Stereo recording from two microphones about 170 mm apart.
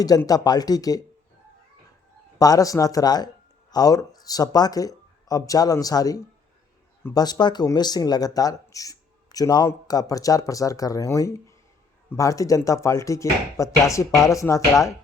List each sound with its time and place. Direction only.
0.0 s speech: 20° left (ahead or behind)
2.4 s speech: 20° left (ahead or behind)